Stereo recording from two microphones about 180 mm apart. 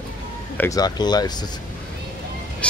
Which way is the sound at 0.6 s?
20° left (ahead or behind).